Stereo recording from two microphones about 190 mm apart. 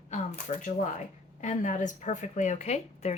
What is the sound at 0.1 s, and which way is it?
A woman's voice, 40° left (ahead or behind).